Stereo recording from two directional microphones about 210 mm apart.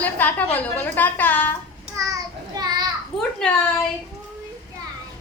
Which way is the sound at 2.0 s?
15° right (ahead or behind).